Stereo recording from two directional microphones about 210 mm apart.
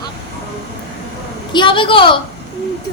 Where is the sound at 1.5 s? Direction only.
25° left (ahead or behind).